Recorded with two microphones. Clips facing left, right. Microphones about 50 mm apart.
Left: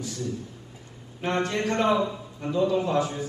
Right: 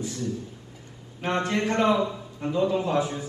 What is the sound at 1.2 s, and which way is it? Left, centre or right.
A man's voice, right.